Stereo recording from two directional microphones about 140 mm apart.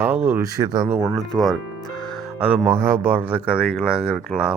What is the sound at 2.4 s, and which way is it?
Speech, 10° right (ahead or behind).